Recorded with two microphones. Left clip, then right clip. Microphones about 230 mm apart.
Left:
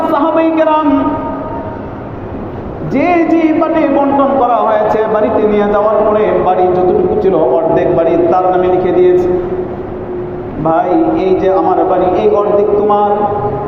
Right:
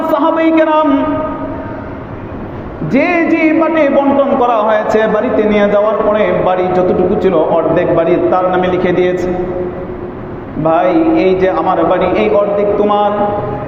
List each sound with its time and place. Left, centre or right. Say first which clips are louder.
0.1 s a sound: right 3 dB; right
2.9 s a man's voice: left 1 dB; right
10.6 s a man's voice: right 1 dB; right